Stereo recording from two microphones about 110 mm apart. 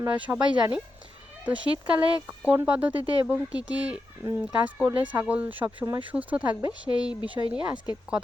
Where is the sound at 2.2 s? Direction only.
15° right (ahead or behind).